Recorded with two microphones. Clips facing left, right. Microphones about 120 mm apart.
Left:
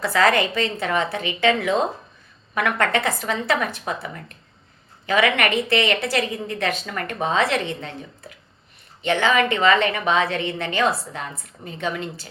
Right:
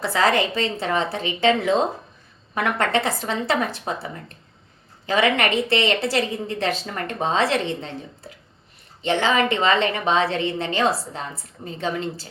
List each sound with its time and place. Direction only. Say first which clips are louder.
0.0 s a woman's voice: left 1 dB; 25° right (ahead or behind)